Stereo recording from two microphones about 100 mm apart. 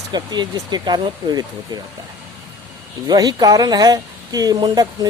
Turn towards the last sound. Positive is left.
turn(degrees=-45)  # may be behind; listen again after turning